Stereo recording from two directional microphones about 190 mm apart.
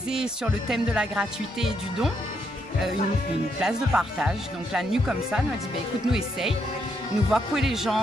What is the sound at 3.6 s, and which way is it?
Speech, 5° right (ahead or behind).